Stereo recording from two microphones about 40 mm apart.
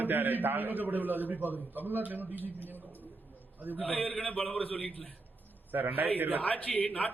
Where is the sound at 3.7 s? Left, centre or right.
Left.